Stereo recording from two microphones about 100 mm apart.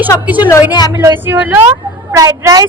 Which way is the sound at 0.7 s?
40° left (ahead or behind).